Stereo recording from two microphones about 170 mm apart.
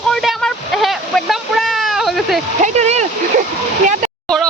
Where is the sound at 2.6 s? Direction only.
40° right (ahead or behind).